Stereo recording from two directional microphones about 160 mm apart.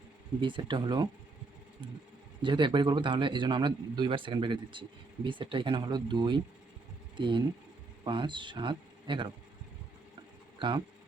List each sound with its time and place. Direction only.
0.4 s a man's voice: 30° right (ahead or behind)
2.4 s a man's voice: 30° right (ahead or behind)
10.6 s speech: 30° right (ahead or behind)